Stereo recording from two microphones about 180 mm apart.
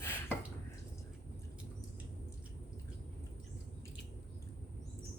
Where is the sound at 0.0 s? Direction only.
10° left (ahead or behind).